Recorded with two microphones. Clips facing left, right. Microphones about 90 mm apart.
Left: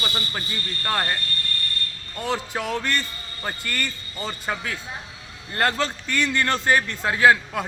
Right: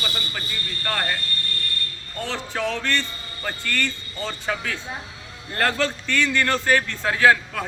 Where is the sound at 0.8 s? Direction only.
15° left (ahead or behind).